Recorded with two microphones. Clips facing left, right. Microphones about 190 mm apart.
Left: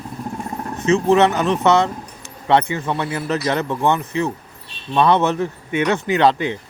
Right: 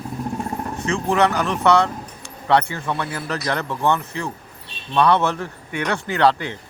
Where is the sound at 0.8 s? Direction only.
20° left (ahead or behind).